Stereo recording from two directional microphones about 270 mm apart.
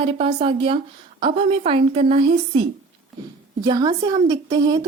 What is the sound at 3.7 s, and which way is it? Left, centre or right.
A woman's voice, centre.